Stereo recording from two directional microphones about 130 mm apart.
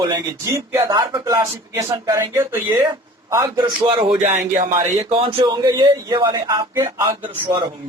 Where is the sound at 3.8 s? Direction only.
40° right (ahead or behind).